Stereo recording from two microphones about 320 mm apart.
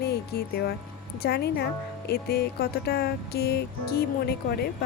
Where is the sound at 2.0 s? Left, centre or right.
Left.